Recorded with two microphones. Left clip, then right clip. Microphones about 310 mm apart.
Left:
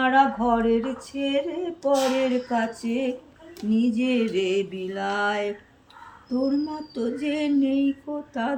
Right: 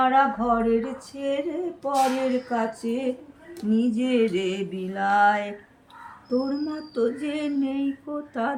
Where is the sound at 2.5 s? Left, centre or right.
Centre.